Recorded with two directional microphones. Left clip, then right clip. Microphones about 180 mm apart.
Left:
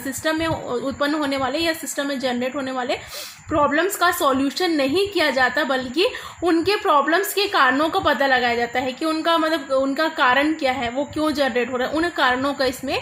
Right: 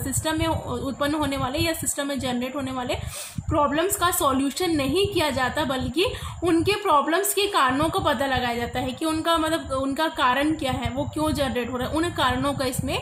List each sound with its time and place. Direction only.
0.3 s a woman's voice: 45° left (ahead or behind)